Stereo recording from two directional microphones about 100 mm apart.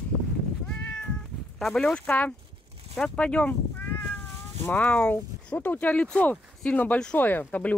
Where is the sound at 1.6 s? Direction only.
5° left (ahead or behind).